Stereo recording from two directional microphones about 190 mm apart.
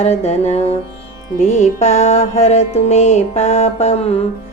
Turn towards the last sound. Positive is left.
turn(degrees=35)  # may be behind; listen again after turning